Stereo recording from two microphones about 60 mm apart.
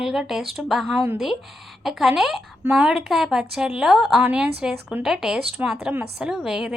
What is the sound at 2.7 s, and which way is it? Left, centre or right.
Speech, centre.